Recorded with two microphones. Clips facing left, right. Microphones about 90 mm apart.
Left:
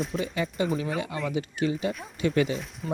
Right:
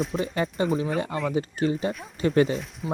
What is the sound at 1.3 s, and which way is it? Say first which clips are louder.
Speech: right 2 dB; 40° right (ahead or behind).